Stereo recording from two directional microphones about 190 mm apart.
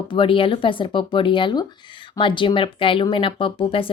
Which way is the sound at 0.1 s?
25° left (ahead or behind).